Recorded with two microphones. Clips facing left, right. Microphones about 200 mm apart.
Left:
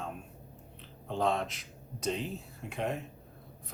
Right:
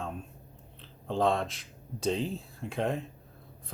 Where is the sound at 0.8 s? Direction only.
30° right (ahead or behind).